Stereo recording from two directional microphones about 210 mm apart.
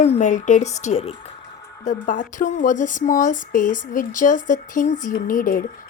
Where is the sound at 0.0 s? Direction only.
35° left (ahead or behind).